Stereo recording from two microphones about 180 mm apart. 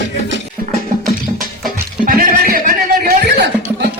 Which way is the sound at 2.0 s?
50° right (ahead or behind).